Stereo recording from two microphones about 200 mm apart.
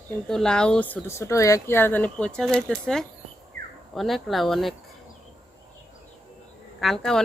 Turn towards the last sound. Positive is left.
turn(degrees=0)  # may be behind; listen again after turning